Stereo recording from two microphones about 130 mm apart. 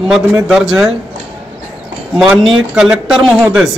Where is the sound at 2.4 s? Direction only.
5° right (ahead or behind).